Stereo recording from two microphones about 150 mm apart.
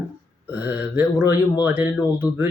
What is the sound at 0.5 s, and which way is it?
Speech, 10° right (ahead or behind).